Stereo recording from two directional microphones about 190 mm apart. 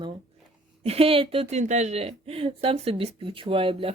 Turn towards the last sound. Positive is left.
turn(degrees=-30)  # may be behind; listen again after turning